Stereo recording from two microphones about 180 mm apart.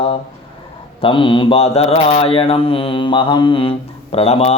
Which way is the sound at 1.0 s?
25° left (ahead or behind).